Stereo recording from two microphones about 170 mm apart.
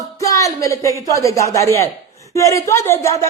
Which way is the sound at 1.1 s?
20° left (ahead or behind).